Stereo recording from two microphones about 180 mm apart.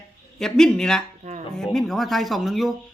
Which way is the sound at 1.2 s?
40° right (ahead or behind).